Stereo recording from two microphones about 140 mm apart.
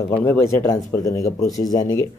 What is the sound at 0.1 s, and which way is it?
Speech, 20° left (ahead or behind).